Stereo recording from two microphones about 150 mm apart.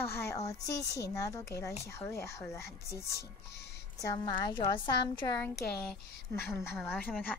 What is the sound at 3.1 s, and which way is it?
Speech, 90° left.